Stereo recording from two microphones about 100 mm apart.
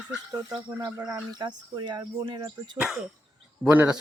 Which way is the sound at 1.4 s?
45° right (ahead or behind).